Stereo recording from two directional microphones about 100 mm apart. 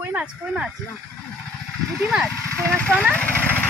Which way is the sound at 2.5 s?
10° left (ahead or behind).